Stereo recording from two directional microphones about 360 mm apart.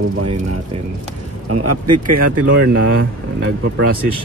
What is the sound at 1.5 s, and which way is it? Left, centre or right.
Speech, right.